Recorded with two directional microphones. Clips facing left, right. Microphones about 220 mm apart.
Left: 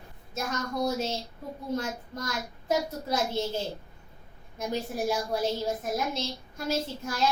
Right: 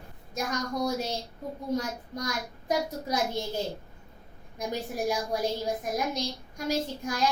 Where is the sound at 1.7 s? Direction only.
15° right (ahead or behind).